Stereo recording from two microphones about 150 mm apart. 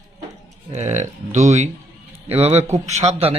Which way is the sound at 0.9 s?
50° right (ahead or behind).